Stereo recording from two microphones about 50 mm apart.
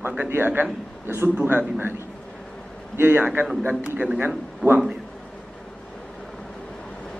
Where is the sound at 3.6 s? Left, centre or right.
Right.